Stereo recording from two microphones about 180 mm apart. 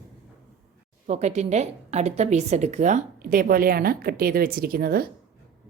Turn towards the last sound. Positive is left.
turn(degrees=-55)  # may be behind; listen again after turning